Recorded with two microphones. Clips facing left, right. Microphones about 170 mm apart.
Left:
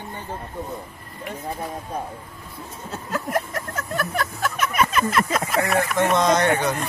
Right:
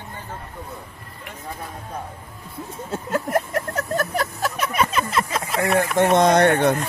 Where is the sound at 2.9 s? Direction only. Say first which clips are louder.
Right 3 dB; 25° right (ahead or behind).